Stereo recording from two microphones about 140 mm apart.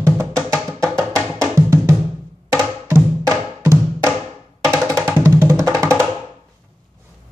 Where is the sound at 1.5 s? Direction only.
20° right (ahead or behind).